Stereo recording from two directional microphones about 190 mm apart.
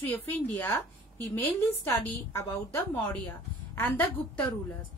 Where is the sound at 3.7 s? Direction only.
10° left (ahead or behind).